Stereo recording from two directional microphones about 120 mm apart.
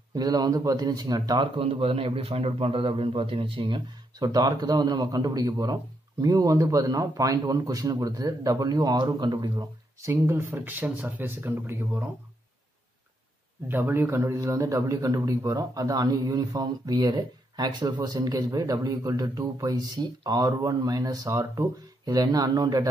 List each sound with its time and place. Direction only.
0.1 s a man's voice: 35° right (ahead or behind)
1.6 s a man's voice: 55° right (ahead or behind); by 12.1 s 15° right (ahead or behind)
13.7 s a man's voice: 15° right (ahead or behind); by 22.8 s 35° right (ahead or behind)